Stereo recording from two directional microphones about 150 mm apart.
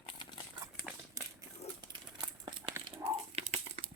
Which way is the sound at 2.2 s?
30° right (ahead or behind).